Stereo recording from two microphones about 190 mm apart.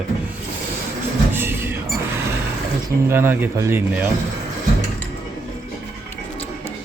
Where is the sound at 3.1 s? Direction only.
10° right (ahead or behind).